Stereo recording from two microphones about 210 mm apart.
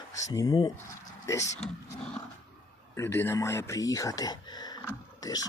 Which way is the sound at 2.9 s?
10° left (ahead or behind).